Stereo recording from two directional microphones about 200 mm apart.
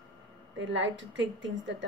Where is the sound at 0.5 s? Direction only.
65° right (ahead or behind).